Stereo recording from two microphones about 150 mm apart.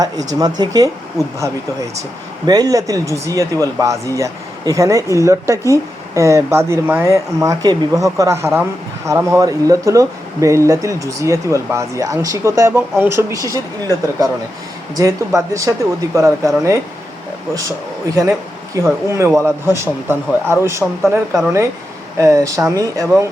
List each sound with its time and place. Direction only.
0.3 s speech: 25° right (ahead or behind)
18.1 s a man's voice: 20° right (ahead or behind)
21.0 s speech: centre (ahead or behind)
22.2 s speech: 20° right (ahead or behind)